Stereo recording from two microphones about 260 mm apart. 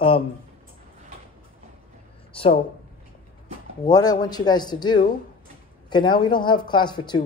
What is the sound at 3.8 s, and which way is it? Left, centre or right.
Speech, centre.